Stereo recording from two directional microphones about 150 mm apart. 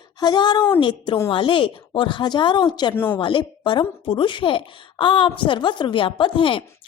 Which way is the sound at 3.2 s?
35° left (ahead or behind).